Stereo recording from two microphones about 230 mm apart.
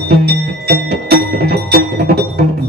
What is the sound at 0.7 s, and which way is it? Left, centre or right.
Music, right.